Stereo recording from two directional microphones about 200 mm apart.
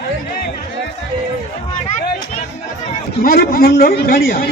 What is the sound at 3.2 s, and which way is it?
A man's voice, 50° left (ahead or behind).